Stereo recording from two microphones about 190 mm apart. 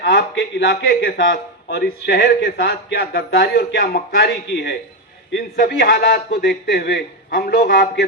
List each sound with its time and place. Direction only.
0.0 s a man's voice: 65° left (ahead or behind)